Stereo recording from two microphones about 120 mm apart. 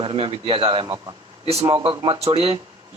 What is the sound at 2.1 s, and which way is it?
Speech, 55° right (ahead or behind).